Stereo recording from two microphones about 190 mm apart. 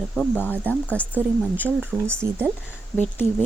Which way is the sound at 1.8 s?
10° right (ahead or behind).